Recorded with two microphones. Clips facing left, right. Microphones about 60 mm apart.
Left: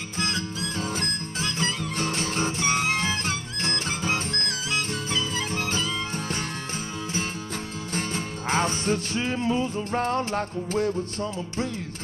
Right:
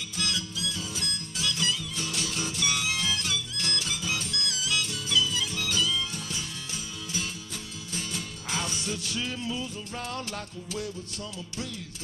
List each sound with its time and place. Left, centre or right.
0.2 s music: left
7.9 s music: left